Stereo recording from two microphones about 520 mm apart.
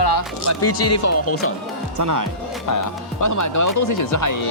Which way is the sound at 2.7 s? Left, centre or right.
Left.